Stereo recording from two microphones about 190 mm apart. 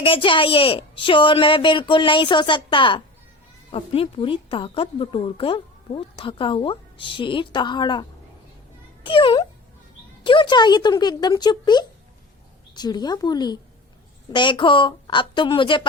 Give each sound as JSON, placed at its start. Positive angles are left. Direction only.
{"t": 0.0, "sound": "speech", "side_deg": 25}
{"t": 9.0, "sound": "speech", "side_deg": 25}